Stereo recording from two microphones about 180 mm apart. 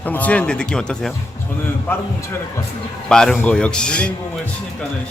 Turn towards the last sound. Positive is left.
turn(degrees=5)  # may be behind; listen again after turning